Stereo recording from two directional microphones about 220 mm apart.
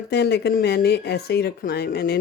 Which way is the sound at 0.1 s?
50° left (ahead or behind).